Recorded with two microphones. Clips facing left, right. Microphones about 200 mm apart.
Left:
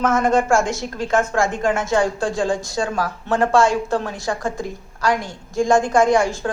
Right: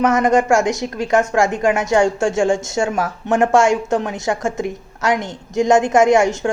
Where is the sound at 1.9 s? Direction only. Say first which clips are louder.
Right 4 dB; 25° right (ahead or behind).